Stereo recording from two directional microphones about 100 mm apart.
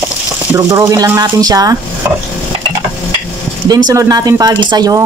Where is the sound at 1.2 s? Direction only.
35° right (ahead or behind).